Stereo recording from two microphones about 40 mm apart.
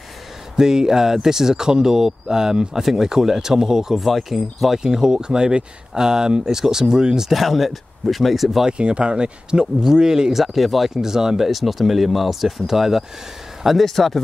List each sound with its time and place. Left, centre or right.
0.6 s speech: centre
4.0 s speech: centre
7.2 s speech: centre
8.6 s speech: right
10.4 s speech: centre
11.0 s speech: centre
13.8 s speech: centre